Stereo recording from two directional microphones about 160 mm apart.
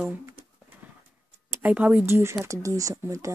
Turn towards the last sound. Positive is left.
turn(degrees=-20)  # may be behind; listen again after turning